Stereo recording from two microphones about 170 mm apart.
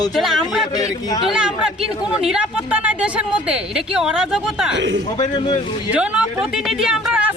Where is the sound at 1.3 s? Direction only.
5° right (ahead or behind).